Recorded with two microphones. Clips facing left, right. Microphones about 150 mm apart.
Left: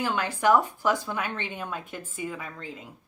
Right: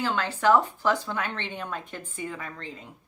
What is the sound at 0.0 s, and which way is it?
Speech, 10° left (ahead or behind).